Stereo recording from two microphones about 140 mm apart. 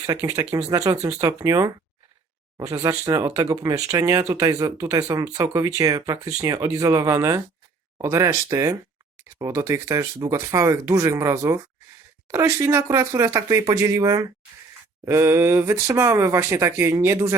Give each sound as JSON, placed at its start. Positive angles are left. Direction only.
{"t": 0.0, "sound": "speech", "side_deg": -20}